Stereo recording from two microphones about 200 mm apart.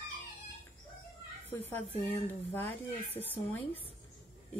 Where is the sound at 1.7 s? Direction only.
10° left (ahead or behind).